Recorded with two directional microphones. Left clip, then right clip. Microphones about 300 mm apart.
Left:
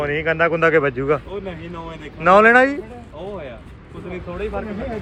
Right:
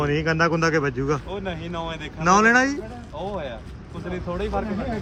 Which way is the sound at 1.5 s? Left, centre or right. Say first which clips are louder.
Right 2 dB; right.